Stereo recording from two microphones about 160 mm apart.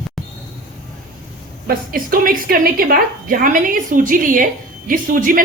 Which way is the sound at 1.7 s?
60° right (ahead or behind).